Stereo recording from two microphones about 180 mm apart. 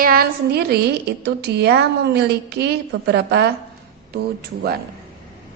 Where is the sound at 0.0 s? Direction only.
55° right (ahead or behind).